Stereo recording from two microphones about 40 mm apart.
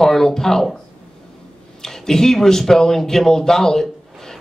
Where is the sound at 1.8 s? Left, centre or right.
Centre.